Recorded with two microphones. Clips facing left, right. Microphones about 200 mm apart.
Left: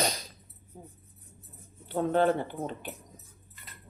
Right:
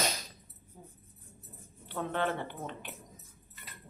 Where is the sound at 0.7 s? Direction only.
25° left (ahead or behind).